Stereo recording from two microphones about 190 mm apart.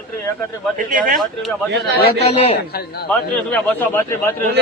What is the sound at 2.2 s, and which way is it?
Speech, 30° left (ahead or behind).